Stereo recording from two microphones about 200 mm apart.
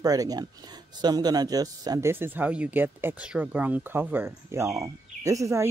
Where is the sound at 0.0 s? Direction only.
20° right (ahead or behind).